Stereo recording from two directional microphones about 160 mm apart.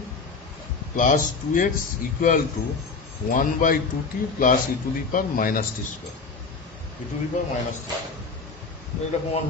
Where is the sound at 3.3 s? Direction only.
55° left (ahead or behind).